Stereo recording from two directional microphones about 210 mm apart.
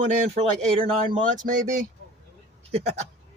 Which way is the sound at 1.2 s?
40° right (ahead or behind).